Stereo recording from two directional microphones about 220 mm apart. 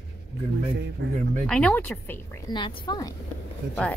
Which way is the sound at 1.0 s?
45° right (ahead or behind).